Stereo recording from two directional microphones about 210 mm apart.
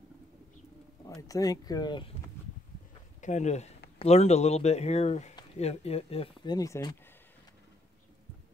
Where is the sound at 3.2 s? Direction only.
35° left (ahead or behind); by 6.9 s 15° left (ahead or behind).